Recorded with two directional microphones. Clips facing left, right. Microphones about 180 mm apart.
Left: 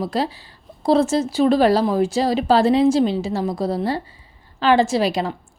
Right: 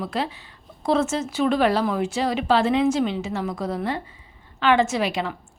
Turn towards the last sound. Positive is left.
turn(degrees=35)  # may be behind; listen again after turning